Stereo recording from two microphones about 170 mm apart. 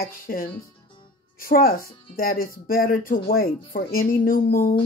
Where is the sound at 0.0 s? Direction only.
60° left (ahead or behind).